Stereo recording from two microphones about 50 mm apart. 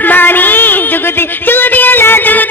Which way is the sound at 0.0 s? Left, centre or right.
Left.